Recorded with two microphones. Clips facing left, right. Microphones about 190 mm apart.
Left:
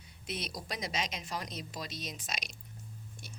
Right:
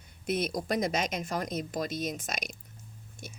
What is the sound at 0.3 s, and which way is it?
Speech, 50° right (ahead or behind).